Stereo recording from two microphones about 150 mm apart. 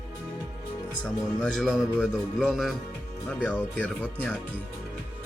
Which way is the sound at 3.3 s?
10° left (ahead or behind).